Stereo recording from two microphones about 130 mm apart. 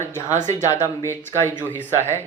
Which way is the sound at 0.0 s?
20° left (ahead or behind).